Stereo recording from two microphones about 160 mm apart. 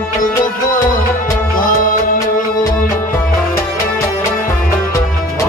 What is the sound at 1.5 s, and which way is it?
Music, 60° left (ahead or behind).